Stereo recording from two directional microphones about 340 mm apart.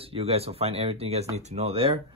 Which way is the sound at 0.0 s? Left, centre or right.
Centre.